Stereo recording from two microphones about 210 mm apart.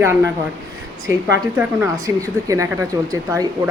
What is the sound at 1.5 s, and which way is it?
Speech, 15° right (ahead or behind).